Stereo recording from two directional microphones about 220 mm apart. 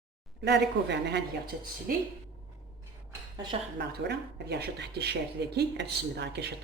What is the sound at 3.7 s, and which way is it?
Speech, 50° right (ahead or behind).